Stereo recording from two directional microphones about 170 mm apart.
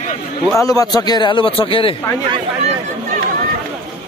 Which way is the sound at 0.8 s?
25° left (ahead or behind).